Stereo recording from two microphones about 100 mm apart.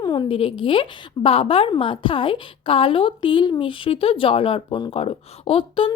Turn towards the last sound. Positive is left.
turn(degrees=65)  # may be behind; listen again after turning